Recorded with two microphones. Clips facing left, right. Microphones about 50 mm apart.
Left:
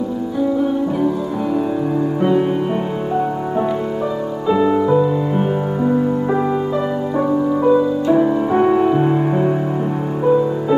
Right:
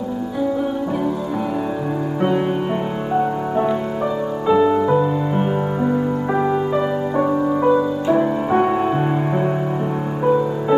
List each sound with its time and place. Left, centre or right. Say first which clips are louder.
4.5 s music: even; centre
7.7 s music: left 2 dB; centre